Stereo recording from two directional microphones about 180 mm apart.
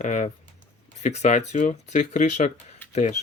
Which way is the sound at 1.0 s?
40° left (ahead or behind).